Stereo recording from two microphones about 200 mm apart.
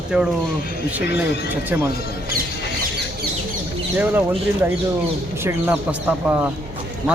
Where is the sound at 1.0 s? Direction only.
55° left (ahead or behind).